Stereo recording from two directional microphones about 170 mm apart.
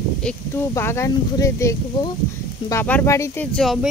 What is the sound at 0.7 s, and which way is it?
Speech, 15° left (ahead or behind).